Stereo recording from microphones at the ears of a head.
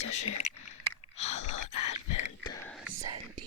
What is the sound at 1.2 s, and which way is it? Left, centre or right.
Gasp, left.